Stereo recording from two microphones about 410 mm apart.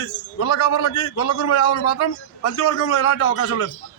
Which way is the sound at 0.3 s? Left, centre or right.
Left.